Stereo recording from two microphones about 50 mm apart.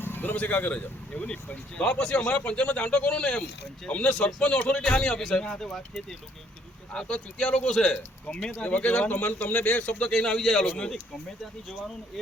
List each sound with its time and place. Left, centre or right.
0.0 s speech: left
4.7 s speech: centre
6.9 s speech: centre
10.1 s speech: centre